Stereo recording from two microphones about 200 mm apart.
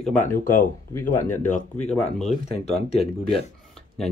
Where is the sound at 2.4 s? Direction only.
30° left (ahead or behind).